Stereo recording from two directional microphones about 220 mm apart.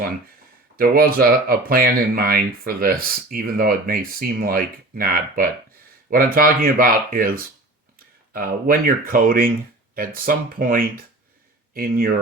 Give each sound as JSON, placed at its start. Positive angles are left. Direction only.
{"t": 0.8, "sound": "speech", "side_deg": -45}